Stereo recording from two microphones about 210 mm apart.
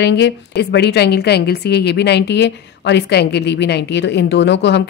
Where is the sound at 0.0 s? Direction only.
55° left (ahead or behind).